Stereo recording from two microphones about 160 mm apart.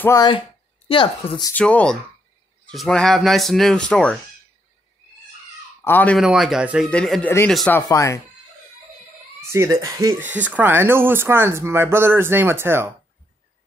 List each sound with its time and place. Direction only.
0.8 s speech: 30° left (ahead or behind)
1.5 s speech: 10° left (ahead or behind)
5.9 s speech: 10° left (ahead or behind)
6.1 s speech: centre (ahead or behind)
6.9 s speech: 5° left (ahead or behind)
7.9 s speech: 20° left (ahead or behind)
9.8 s speech: 20° right (ahead or behind)